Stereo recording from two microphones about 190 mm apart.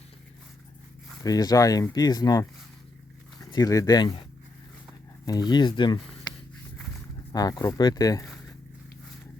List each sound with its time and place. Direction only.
1.2 s speech: 20° left (ahead or behind)
5.2 s speech: 20° left (ahead or behind)
7.3 s speech: 20° left (ahead or behind)